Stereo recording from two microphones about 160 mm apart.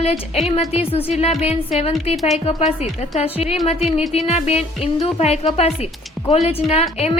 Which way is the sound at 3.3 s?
40° left (ahead or behind).